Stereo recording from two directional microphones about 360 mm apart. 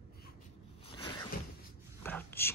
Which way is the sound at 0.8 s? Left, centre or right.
Centre.